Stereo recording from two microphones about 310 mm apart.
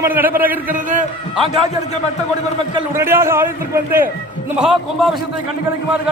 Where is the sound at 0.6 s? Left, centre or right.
Right.